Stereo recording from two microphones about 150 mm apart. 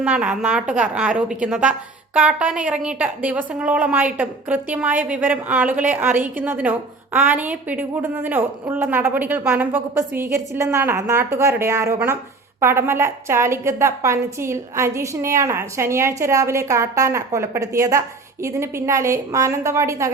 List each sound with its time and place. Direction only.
0.0 s a woman's voice: 10° right (ahead or behind)